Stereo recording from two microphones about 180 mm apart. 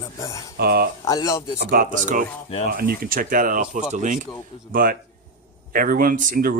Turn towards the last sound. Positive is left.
turn(degrees=-50)  # may be behind; listen again after turning